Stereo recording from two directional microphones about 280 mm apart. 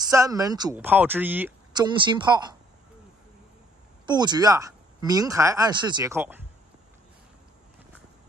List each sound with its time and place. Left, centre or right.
0.1 s speech: centre
4.0 s speech: centre